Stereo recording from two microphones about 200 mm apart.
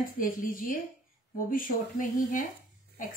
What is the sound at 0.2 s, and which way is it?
A woman's voice, 45° left (ahead or behind).